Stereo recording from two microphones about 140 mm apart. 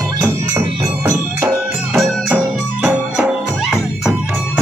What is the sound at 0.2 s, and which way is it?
Music, 15° right (ahead or behind).